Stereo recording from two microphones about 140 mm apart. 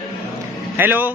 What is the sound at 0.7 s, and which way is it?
Speech, 15° right (ahead or behind).